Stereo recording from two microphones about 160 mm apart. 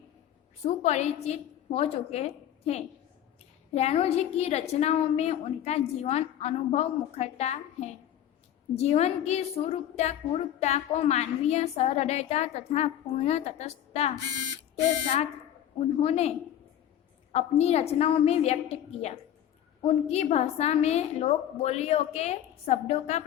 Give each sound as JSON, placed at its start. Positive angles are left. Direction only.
{"t": 0.6, "sound": "a woman's voice", "side_deg": 45}
{"t": 16.0, "sound": "a woman's voice", "side_deg": 40}
{"t": 17.3, "sound": "a woman's voice", "side_deg": 40}